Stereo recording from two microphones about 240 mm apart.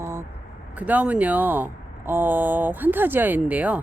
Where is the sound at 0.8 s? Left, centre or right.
Centre.